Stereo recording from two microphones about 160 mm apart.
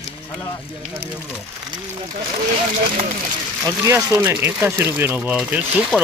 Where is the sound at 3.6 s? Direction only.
20° right (ahead or behind).